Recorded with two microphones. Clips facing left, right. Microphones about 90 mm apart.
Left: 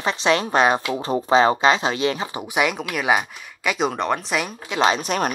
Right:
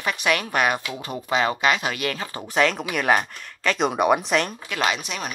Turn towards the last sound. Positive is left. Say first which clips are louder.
# left 9 dB
turn(degrees=45)  # may be behind; listen again after turning